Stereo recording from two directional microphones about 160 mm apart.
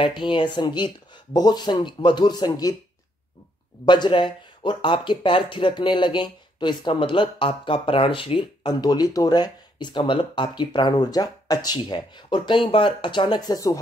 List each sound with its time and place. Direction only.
0.0 s speech: 30° left (ahead or behind)
3.8 s speech: 30° left (ahead or behind)